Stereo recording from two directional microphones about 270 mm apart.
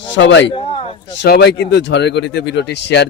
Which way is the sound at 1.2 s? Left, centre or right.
Left.